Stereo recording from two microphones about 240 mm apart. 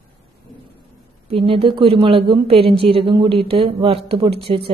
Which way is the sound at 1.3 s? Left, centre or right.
Right.